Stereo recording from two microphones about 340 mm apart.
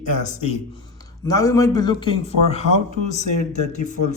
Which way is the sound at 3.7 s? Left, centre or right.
Left.